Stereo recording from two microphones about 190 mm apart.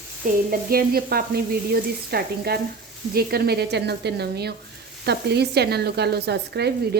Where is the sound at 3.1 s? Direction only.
55° right (ahead or behind).